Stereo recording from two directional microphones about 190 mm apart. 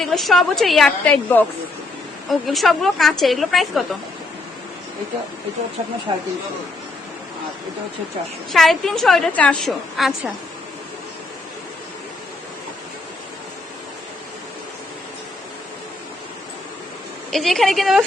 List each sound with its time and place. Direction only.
0.0 s a woman's voice: centre (ahead or behind)
6.1 s speech: 25° right (ahead or behind)
8.5 s a woman's voice: centre (ahead or behind)
17.3 s a woman's voice: centre (ahead or behind)